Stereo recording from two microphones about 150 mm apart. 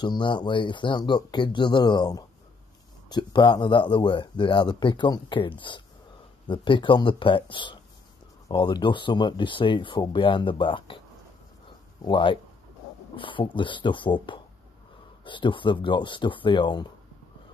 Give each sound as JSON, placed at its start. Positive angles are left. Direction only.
{"t": 0.0, "sound": "speech", "side_deg": 30}
{"t": 12.0, "sound": "speech", "side_deg": 35}